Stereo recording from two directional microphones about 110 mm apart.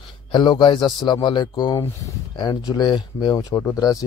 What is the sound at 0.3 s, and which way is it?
Speech, 40° left (ahead or behind).